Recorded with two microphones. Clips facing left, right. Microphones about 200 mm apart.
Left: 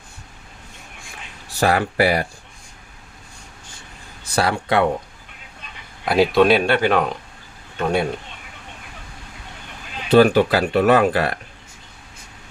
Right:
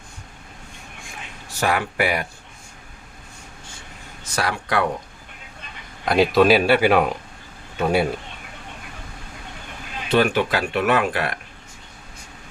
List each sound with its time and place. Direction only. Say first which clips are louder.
1.5 s speech: left 4 dB; 35° left (ahead or behind)
4.2 s speech: left 5 dB; 30° left (ahead or behind)
6.1 s speech: left 1 dB; centre (ahead or behind)
10.1 s speech: left 6 dB; 35° left (ahead or behind)